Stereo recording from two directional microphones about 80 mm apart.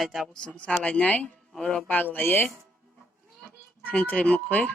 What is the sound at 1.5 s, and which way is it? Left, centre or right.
Speech, centre.